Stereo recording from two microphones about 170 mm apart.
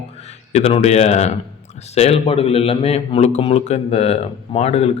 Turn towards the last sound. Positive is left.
turn(degrees=40)  # may be behind; listen again after turning